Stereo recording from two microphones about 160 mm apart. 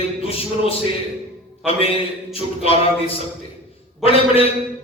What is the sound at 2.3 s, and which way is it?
Music, 35° left (ahead or behind).